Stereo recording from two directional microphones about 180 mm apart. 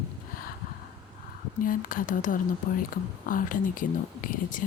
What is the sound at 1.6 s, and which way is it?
Speech, 50° left (ahead or behind).